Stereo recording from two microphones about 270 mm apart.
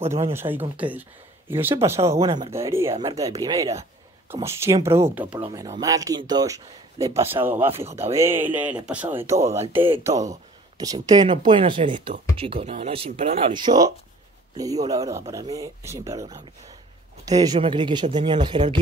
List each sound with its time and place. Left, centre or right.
0.3 s speech: centre
2.9 s speech: right